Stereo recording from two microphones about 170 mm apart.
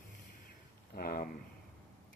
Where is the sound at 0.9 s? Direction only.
60° left (ahead or behind).